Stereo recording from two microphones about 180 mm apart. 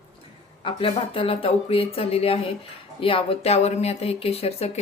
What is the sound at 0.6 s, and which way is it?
Speech, 30° left (ahead or behind).